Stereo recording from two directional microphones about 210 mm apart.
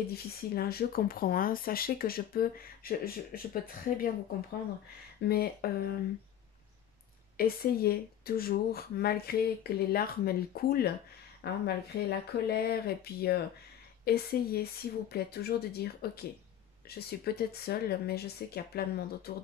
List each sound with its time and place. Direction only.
0.1 s speech: 45° left (ahead or behind)
5.3 s speech: 45° left (ahead or behind)
7.3 s speech: 45° left (ahead or behind)